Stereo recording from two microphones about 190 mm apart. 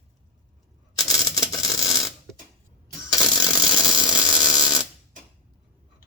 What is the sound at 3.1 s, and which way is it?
Ratchet, 20° left (ahead or behind).